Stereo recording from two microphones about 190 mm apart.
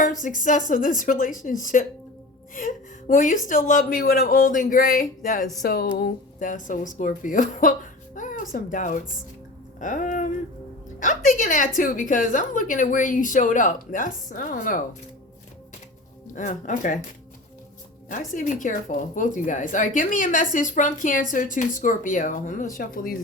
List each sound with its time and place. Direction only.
0.2 s a woman's voice: 40° left (ahead or behind)
16.3 s speech: 40° left (ahead or behind)
18.3 s a woman's voice: 45° left (ahead or behind)